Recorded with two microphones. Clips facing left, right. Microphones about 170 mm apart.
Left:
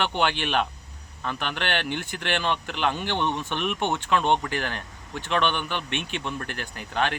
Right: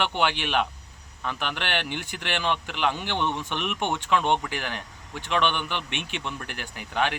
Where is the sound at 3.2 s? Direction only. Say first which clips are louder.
Left 1 dB; 15° left (ahead or behind).